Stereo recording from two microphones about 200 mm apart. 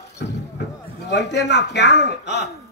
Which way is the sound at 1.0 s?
60° left (ahead or behind).